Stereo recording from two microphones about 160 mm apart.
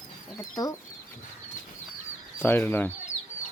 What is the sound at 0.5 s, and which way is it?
Speech, 25° left (ahead or behind).